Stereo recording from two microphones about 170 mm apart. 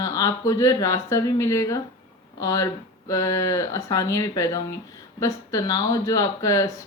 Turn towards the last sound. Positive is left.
turn(degrees=20)  # may be behind; listen again after turning